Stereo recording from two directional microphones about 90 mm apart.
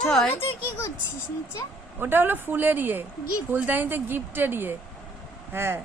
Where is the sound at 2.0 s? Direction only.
25° right (ahead or behind).